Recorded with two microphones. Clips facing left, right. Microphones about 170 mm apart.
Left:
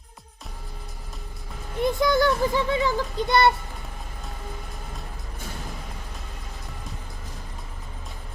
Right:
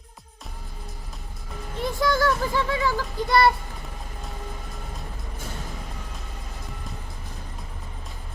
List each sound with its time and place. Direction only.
1.8 s speech: 20° left (ahead or behind)